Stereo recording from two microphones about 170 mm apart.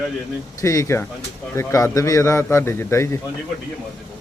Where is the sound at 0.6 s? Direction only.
20° left (ahead or behind).